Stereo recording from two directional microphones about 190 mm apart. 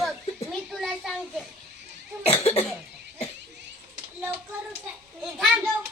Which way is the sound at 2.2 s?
35° left (ahead or behind).